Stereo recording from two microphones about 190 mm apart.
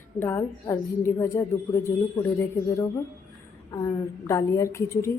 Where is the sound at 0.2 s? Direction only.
15° left (ahead or behind).